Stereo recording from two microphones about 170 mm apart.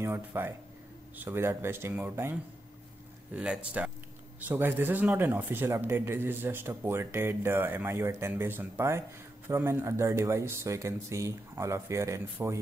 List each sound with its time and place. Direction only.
0.0 s speech: 15° right (ahead or behind)
3.3 s speech: 5° right (ahead or behind)